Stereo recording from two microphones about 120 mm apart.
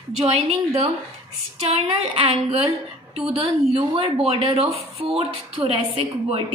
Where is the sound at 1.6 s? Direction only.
55° right (ahead or behind).